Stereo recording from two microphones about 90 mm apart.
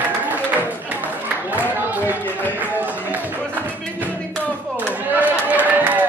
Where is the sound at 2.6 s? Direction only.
20° right (ahead or behind).